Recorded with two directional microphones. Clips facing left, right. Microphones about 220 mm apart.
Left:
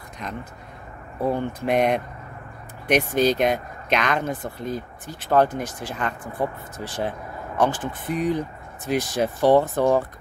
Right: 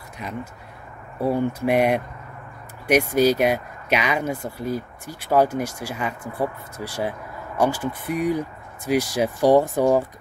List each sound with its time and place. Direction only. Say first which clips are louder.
0.2 s speech: right 2 dB; 10° right (ahead or behind)